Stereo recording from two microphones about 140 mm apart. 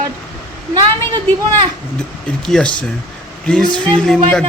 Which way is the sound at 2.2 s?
5° left (ahead or behind).